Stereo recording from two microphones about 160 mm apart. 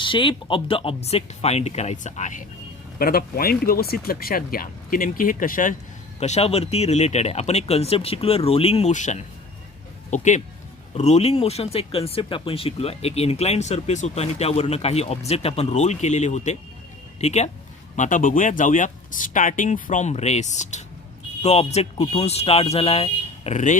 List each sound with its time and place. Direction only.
0.0 s speech: 30° left (ahead or behind); by 2.4 s 50° left (ahead or behind)
3.0 s speech: 65° left (ahead or behind)
6.1 s speech: 40° left (ahead or behind)